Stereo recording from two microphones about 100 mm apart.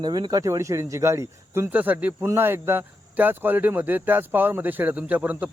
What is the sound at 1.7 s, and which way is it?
Speech, 15° right (ahead or behind).